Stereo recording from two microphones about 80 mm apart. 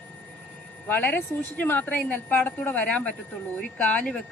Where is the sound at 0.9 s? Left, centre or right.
Left.